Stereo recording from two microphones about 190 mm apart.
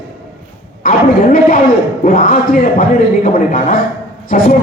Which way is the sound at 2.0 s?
50° left (ahead or behind).